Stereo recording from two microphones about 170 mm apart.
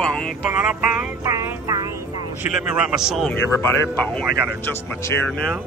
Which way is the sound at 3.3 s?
10° left (ahead or behind).